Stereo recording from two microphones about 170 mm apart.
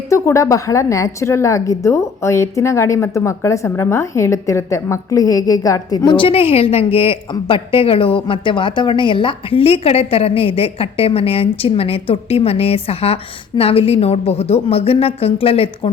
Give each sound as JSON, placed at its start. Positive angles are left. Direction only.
{"t": 0.1, "sound": "a woman's voice", "side_deg": 15}